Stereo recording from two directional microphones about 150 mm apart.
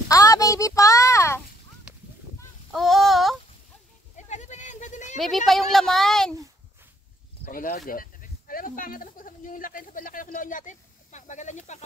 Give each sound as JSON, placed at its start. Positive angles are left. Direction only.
{"t": 0.1, "sound": "a sound", "side_deg": 25}
{"t": 2.7, "sound": "child singing", "side_deg": 0}
{"t": 4.3, "sound": "sheep", "side_deg": 50}
{"t": 5.2, "sound": "speech", "side_deg": 0}
{"t": 7.4, "sound": "speech", "side_deg": 65}